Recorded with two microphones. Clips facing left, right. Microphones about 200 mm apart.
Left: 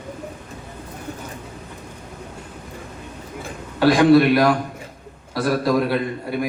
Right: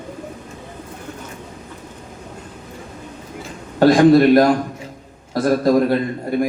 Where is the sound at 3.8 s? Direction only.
45° right (ahead or behind).